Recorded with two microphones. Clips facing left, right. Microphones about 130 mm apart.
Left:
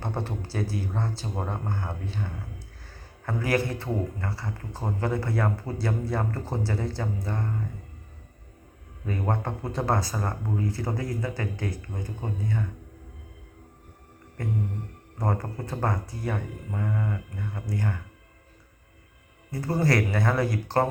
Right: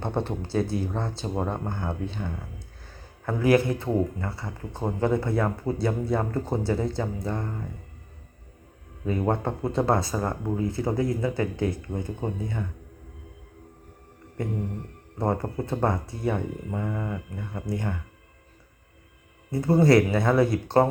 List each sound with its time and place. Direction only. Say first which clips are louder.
0.0 s speech: right 4 dB; 20° right (ahead or behind)
9.0 s speech: right 4 dB; 20° right (ahead or behind)
15.2 s speech: right 4 dB; 20° right (ahead or behind)
19.5 s speech: right 6 dB; 25° right (ahead or behind)